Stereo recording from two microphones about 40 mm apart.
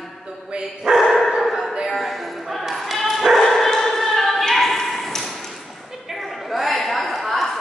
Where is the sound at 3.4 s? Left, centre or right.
Centre.